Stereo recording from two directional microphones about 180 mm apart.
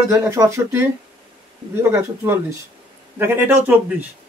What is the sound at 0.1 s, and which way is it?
Speech, 15° right (ahead or behind).